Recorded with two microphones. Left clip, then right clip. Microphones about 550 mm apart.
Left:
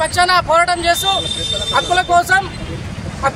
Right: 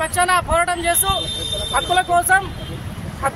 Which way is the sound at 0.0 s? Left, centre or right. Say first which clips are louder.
Left 4 dB; right.